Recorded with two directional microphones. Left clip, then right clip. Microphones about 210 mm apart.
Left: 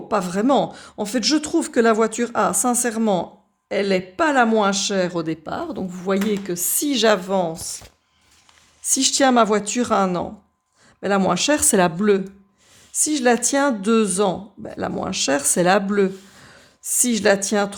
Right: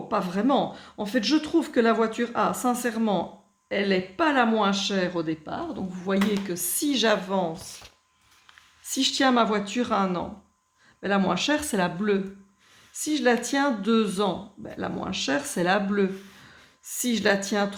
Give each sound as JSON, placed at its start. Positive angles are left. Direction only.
{"t": 0.1, "sound": "speech", "side_deg": 50}
{"t": 8.8, "sound": "speech", "side_deg": 45}